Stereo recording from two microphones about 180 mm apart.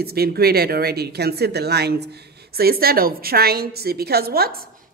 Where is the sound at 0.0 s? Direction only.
60° right (ahead or behind).